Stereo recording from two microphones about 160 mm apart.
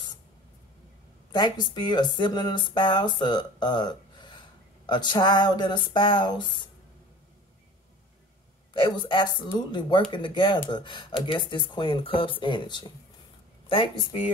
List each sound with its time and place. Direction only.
1.3 s speech: 25° left (ahead or behind)
8.7 s speech: 30° left (ahead or behind)